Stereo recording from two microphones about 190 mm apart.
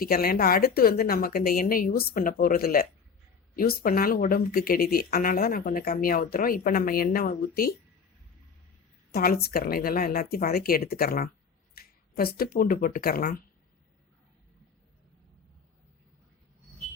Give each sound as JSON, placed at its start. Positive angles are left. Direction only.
{"t": 0.0, "sound": "speech", "side_deg": 50}
{"t": 9.1, "sound": "speech", "side_deg": 50}